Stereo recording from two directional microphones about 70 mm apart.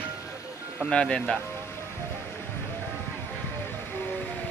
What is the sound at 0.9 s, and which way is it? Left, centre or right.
Speech, centre.